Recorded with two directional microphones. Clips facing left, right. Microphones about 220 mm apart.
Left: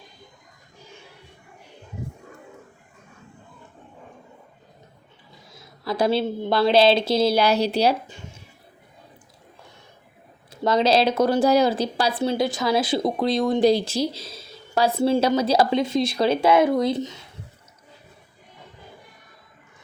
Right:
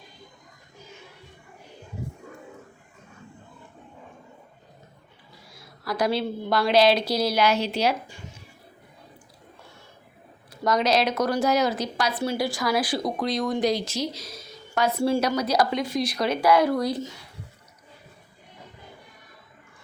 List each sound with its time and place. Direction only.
5.3 s a woman's voice: 20° left (ahead or behind)
10.5 s a woman's voice: 25° left (ahead or behind)